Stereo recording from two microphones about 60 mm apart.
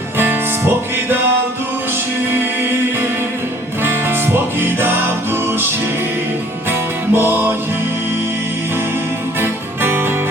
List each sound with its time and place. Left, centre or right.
0.2 s music: right
3.8 s music: right
6.7 s music: right
9.4 s music: right